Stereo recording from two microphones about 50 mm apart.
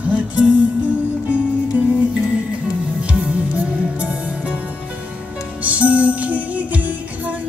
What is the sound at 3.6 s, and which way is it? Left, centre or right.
Music, right.